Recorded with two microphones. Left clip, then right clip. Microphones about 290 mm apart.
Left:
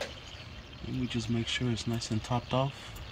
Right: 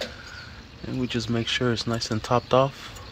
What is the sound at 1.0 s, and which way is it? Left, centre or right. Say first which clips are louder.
Speech: right 7 dB; centre.